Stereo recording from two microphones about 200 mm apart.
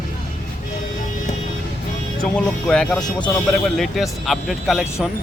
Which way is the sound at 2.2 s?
5° left (ahead or behind).